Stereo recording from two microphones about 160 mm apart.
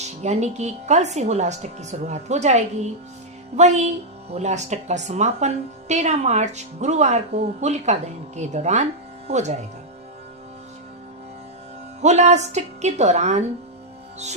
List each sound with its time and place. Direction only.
0.0 s speech: 45° right (ahead or behind)
12.0 s speech: 45° right (ahead or behind)